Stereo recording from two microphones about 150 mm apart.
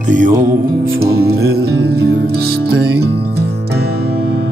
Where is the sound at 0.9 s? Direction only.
90° right.